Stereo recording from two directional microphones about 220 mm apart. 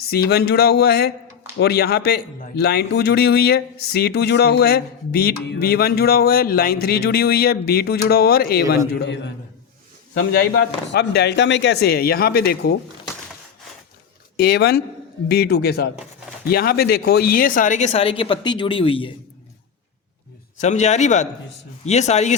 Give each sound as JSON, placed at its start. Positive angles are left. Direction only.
{"t": 0.1, "sound": "a man's voice", "side_deg": 45}
{"t": 14.3, "sound": "a man's voice", "side_deg": 50}
{"t": 20.6, "sound": "speech", "side_deg": 30}